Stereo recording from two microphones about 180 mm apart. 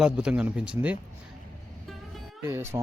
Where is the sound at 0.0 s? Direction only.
5° right (ahead or behind).